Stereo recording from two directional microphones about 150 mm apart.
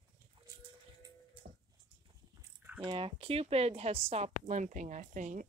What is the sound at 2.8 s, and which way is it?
Speech, 35° right (ahead or behind).